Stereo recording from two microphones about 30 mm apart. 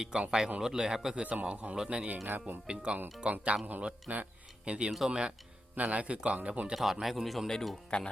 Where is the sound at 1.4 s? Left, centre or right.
Right.